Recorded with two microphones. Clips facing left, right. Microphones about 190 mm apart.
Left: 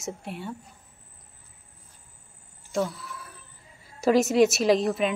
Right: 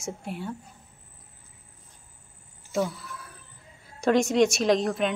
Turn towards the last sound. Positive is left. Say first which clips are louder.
# left 1 dB
turn(degrees=5)  # may be behind; listen again after turning